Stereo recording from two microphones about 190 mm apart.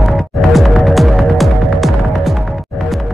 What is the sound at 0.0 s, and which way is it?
Throbbing, centre (ahead or behind).